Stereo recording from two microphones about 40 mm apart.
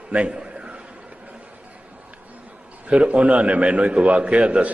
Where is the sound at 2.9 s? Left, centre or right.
Right.